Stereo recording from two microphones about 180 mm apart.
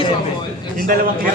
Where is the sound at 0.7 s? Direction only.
50° right (ahead or behind).